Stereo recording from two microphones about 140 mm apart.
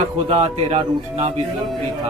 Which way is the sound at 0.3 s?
50° right (ahead or behind).